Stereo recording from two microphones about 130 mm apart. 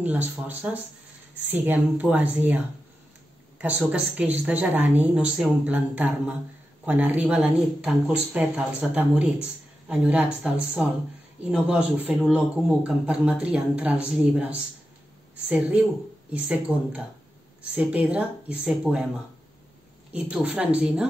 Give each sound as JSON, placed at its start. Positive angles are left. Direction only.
{"t": 0.0, "sound": "a man's voice", "side_deg": -15}
{"t": 20.1, "sound": "a man's voice", "side_deg": -10}